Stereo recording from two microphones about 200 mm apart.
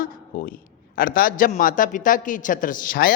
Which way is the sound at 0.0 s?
45° left (ahead or behind).